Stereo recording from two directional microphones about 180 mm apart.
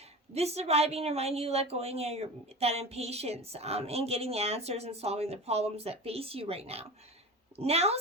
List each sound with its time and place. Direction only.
0.3 s a woman's voice: 35° right (ahead or behind)